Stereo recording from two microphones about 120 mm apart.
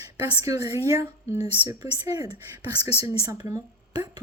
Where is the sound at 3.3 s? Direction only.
35° right (ahead or behind).